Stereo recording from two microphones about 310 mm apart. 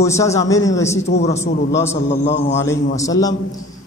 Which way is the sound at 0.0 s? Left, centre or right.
Centre.